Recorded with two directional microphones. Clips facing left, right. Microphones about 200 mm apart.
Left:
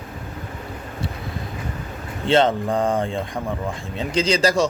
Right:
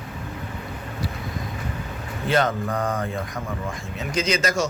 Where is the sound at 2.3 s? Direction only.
30° left (ahead or behind).